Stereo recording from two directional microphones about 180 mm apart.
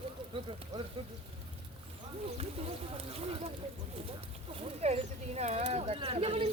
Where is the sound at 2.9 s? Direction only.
30° right (ahead or behind).